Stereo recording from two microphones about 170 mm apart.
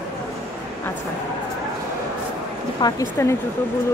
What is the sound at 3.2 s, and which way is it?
Speech, 15° left (ahead or behind).